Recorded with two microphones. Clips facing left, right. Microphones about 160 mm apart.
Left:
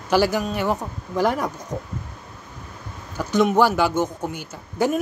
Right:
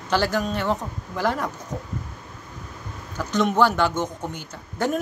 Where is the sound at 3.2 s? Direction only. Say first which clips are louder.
Left 2 dB; 10° left (ahead or behind).